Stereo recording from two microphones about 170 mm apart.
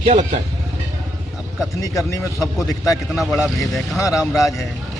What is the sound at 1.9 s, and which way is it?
A man's voice, 20° left (ahead or behind).